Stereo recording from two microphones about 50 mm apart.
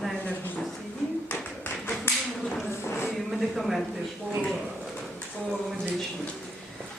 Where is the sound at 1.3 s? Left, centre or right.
Left.